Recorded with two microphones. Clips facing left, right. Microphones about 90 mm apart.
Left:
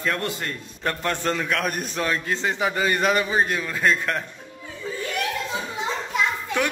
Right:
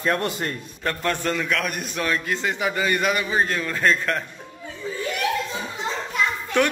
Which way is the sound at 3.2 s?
20° left (ahead or behind).